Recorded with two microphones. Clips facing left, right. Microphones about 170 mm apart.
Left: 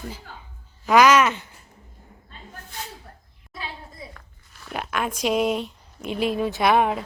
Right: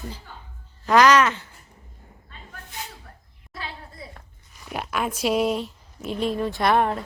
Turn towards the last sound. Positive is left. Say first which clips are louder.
# left 1 dB
turn(degrees=5)  # may be behind; listen again after turning